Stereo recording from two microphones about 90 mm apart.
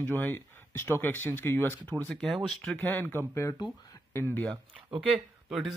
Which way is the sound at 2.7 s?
20° left (ahead or behind).